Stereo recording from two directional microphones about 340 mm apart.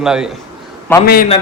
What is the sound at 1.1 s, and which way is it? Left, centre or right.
Speech, left.